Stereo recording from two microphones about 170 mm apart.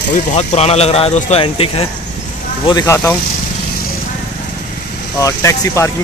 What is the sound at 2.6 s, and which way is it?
Speech, 20° left (ahead or behind).